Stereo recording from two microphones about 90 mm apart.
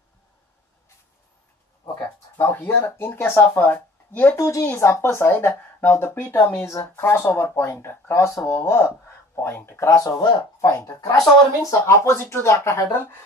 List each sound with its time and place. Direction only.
2.3 s speech: 20° left (ahead or behind)
4.4 s speech: 35° left (ahead or behind)
9.8 s speech: 35° left (ahead or behind)